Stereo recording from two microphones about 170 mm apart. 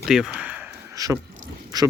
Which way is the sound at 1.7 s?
20° right (ahead or behind).